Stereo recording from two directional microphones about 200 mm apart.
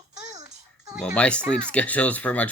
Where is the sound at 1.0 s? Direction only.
5° left (ahead or behind).